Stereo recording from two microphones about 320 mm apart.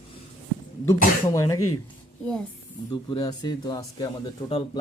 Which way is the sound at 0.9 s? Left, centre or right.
Centre.